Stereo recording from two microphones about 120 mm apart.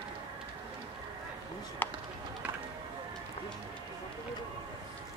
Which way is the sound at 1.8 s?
15° left (ahead or behind).